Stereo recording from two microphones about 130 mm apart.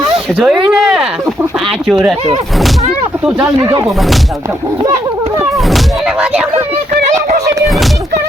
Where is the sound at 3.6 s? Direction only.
25° right (ahead or behind).